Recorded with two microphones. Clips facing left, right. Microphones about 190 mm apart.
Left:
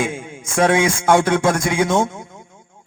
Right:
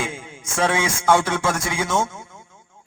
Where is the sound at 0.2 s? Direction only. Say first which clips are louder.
Left 5 dB; 15° left (ahead or behind).